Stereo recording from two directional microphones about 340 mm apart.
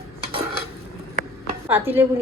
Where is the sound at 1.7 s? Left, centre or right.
Centre.